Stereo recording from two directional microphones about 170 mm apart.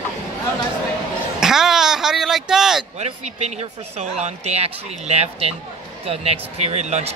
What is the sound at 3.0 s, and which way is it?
Speech, 40° right (ahead or behind).